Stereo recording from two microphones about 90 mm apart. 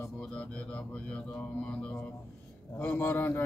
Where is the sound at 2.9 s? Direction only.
25° left (ahead or behind).